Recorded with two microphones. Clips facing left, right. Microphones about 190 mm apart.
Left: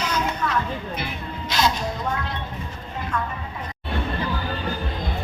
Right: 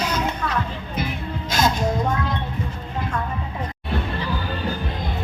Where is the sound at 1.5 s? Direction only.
50° right (ahead or behind).